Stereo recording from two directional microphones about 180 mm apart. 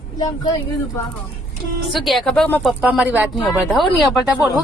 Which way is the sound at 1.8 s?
Centre (ahead or behind).